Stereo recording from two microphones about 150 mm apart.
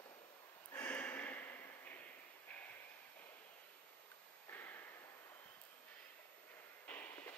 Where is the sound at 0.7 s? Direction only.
15° left (ahead or behind).